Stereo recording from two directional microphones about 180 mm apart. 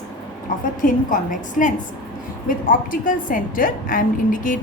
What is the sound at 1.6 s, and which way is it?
A woman's voice, 45° left (ahead or behind).